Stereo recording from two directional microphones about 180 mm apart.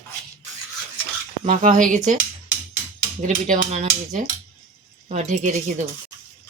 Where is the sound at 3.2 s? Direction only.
40° right (ahead or behind).